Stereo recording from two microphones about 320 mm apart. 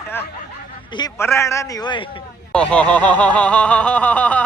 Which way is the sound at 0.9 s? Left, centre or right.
Centre.